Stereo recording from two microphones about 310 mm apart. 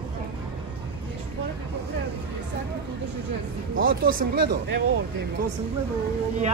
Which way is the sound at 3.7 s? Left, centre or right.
Right.